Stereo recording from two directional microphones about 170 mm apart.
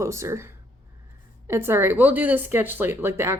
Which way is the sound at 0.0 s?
15° right (ahead or behind).